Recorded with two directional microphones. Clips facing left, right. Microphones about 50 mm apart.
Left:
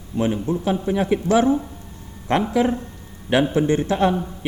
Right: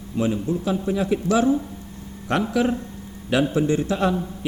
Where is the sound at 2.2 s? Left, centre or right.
Left.